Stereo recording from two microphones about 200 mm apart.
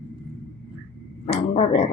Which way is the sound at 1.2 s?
35° left (ahead or behind).